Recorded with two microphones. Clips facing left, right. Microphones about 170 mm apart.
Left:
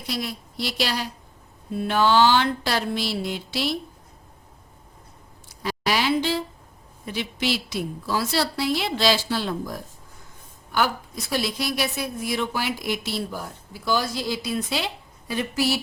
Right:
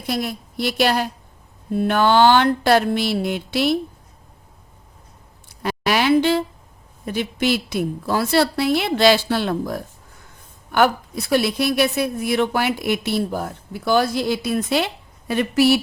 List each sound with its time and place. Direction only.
0.0 s a woman's voice: 50° right (ahead or behind)
5.6 s a woman's voice: 60° right (ahead or behind)